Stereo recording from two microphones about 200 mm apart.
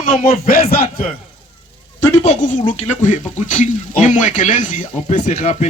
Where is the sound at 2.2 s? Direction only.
40° left (ahead or behind).